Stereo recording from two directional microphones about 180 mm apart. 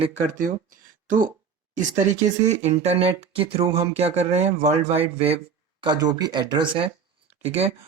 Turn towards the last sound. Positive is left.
turn(degrees=-35)  # may be behind; listen again after turning